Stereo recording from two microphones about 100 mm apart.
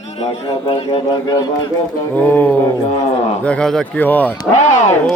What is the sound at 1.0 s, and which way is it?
Speech, 40° left (ahead or behind).